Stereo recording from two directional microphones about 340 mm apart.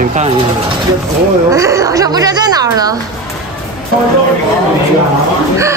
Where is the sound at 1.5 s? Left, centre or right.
Centre.